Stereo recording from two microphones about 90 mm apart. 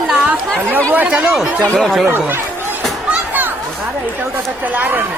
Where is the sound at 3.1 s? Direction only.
20° right (ahead or behind).